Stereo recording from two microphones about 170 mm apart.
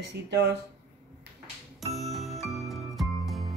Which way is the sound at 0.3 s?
80° right.